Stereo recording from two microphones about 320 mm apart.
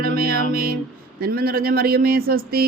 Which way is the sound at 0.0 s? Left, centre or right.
Right.